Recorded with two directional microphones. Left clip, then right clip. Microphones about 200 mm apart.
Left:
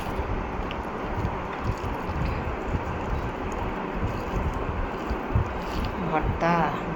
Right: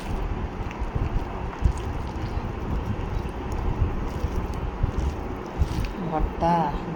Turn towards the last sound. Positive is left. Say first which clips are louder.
# right 1 dB
turn(degrees=-15)  # may be behind; listen again after turning